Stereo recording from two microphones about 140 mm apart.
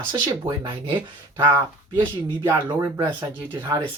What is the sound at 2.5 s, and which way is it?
Speech, 30° right (ahead or behind).